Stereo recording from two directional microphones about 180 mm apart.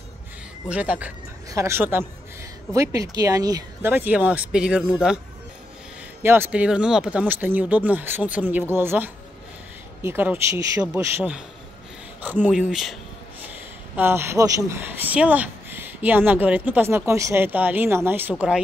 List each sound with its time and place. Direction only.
0.7 s speech: 10° right (ahead or behind)
3.9 s speech: 10° right (ahead or behind)
6.2 s speech: 10° right (ahead or behind)